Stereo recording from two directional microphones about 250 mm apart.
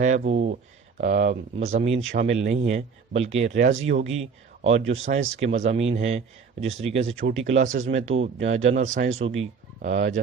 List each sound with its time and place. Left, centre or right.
0.0 s speech: right